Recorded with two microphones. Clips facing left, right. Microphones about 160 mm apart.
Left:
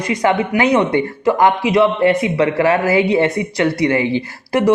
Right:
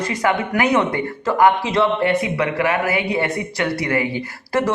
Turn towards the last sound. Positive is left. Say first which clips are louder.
# left 5 dB
turn(degrees=20)  # may be behind; listen again after turning